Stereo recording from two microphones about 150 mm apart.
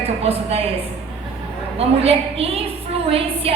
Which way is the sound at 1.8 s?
40° right (ahead or behind).